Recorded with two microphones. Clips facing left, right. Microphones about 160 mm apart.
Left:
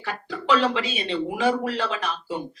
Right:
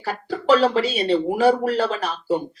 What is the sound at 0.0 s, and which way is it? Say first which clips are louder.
Speech: right 6 dB; 40° right (ahead or behind).